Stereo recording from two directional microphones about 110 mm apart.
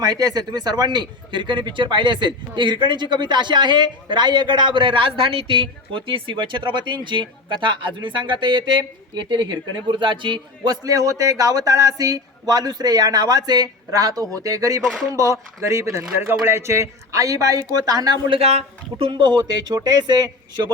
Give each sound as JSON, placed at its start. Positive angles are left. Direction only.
{"t": 0.0, "sound": "speech", "side_deg": -35}
{"t": 10.8, "sound": "speech", "side_deg": -30}
{"t": 14.8, "sound": "speech", "side_deg": 0}
{"t": 15.1, "sound": "speech", "side_deg": -30}
{"t": 18.3, "sound": "speech", "side_deg": -70}
{"t": 19.1, "sound": "speech", "side_deg": -40}